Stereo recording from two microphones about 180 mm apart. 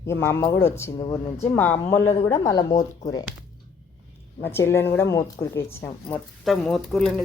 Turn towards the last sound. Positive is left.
turn(degrees=0)  # may be behind; listen again after turning